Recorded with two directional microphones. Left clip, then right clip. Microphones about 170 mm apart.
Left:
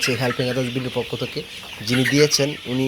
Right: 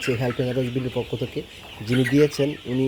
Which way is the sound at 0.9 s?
5° right (ahead or behind).